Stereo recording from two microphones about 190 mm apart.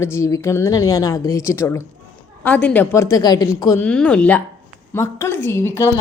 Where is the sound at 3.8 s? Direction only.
5° left (ahead or behind).